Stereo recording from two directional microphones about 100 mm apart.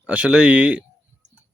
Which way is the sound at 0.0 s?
15° right (ahead or behind).